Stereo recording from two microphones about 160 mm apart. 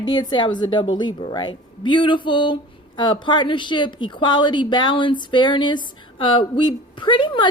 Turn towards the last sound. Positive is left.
turn(degrees=30)  # may be behind; listen again after turning